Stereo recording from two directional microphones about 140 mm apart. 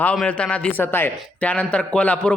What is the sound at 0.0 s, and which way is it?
A man's voice, 10° left (ahead or behind).